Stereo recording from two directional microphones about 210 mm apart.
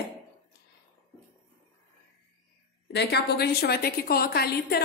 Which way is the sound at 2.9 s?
50° left (ahead or behind).